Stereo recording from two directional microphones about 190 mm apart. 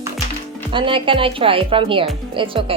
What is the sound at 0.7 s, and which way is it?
A woman's voice, 25° right (ahead or behind).